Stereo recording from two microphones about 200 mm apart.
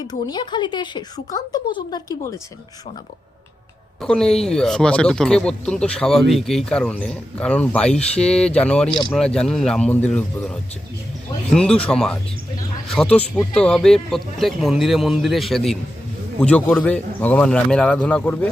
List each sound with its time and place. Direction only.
0.1 s speech: 20° left (ahead or behind)
4.0 s a man's voice: 5° left (ahead or behind)